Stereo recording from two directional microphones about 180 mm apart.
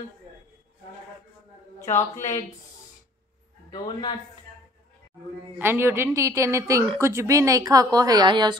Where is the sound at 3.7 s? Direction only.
25° left (ahead or behind).